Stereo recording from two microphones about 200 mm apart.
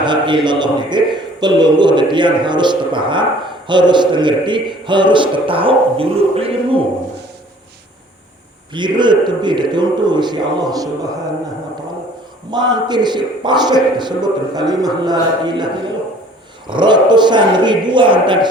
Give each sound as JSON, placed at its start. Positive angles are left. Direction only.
{"t": 0.0, "sound": "a man's voice", "side_deg": -25}
{"t": 8.7, "sound": "a man's voice", "side_deg": -20}
{"t": 12.5, "sound": "a man's voice", "side_deg": -20}